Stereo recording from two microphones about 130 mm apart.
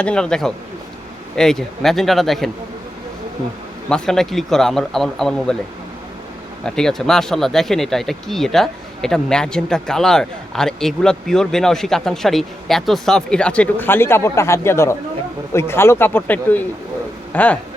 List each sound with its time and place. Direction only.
0.0 s speech: 5° left (ahead or behind)
3.8 s speech: 5° left (ahead or behind)
6.7 s speech: 5° left (ahead or behind)